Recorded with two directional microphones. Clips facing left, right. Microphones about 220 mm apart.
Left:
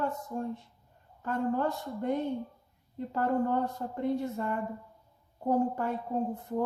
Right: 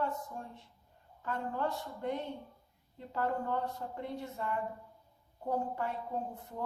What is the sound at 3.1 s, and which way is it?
A woman's voice, 45° left (ahead or behind).